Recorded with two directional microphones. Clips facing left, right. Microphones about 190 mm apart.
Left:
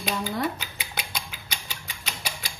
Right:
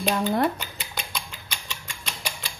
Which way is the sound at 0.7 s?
5° left (ahead or behind).